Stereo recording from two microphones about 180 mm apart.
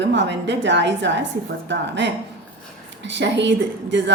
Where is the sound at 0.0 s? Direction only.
75° right (ahead or behind).